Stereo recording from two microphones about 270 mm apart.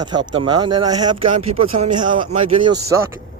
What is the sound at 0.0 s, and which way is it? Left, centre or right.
Speech, centre.